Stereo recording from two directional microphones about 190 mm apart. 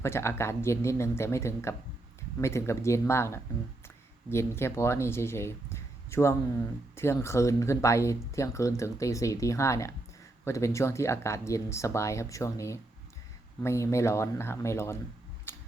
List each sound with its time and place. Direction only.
0.0 s speech: 15° left (ahead or behind)
15.5 s typewriter: 10° left (ahead or behind)